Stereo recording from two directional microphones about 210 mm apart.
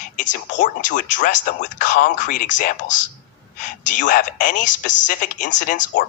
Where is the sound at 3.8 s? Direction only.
40° left (ahead or behind).